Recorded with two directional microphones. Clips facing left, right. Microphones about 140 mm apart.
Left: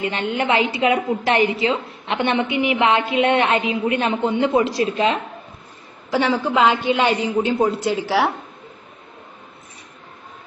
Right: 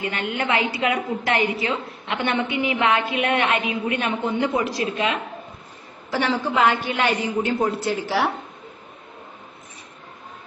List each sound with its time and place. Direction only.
0.0 s a woman's voice: 25° left (ahead or behind)
6.1 s a woman's voice: 15° left (ahead or behind)